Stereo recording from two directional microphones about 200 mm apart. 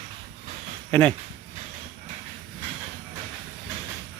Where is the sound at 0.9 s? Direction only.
10° left (ahead or behind).